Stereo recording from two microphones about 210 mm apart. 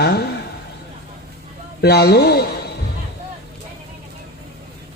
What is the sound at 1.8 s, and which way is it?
Speech, 50° left (ahead or behind).